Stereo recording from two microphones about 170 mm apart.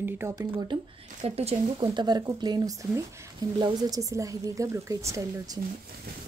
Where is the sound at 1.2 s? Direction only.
35° right (ahead or behind).